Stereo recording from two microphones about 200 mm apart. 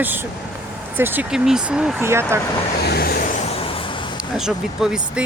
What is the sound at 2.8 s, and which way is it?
Vehicle, 50° left (ahead or behind).